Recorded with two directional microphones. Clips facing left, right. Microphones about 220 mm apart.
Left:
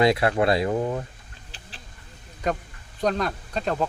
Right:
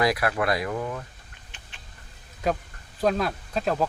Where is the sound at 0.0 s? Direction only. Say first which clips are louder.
Left 4 dB; 25° left (ahead or behind).